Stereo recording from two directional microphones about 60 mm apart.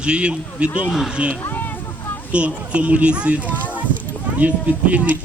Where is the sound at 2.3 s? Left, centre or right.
Right.